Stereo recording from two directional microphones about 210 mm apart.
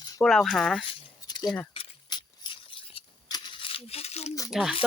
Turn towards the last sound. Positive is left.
turn(degrees=0)  # may be behind; listen again after turning